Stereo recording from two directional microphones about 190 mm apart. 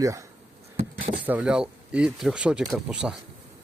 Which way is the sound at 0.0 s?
15° right (ahead or behind).